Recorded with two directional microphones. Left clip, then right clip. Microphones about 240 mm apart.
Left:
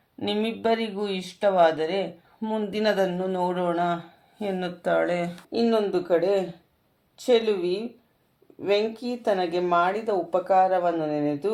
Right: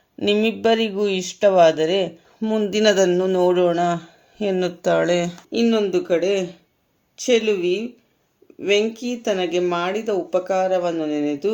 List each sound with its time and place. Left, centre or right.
0.2 s speech: right